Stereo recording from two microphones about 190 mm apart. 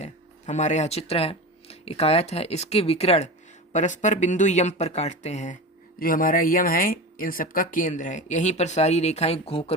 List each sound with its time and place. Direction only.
0.0 s speech: 40° left (ahead or behind)
6.0 s speech: 45° left (ahead or behind); by 9.7 s 30° left (ahead or behind)